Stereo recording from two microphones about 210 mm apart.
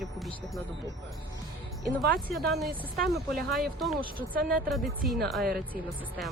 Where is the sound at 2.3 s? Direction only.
Centre (ahead or behind).